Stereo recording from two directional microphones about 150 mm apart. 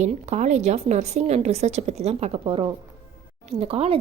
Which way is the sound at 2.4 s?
35° right (ahead or behind).